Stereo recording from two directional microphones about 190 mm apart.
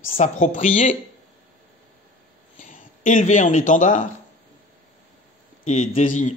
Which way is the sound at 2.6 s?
45° left (ahead or behind).